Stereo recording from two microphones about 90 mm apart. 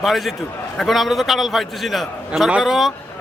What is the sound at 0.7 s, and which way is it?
Speech, centre (ahead or behind).